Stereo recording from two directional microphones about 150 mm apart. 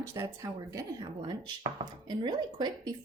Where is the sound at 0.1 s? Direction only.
20° right (ahead or behind).